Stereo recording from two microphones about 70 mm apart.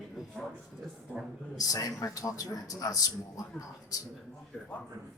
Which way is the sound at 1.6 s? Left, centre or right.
Left.